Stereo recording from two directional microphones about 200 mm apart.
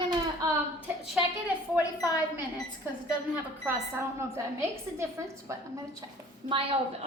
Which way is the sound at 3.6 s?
10° right (ahead or behind).